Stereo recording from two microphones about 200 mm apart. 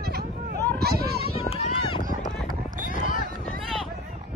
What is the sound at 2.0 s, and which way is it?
Run, 20° right (ahead or behind).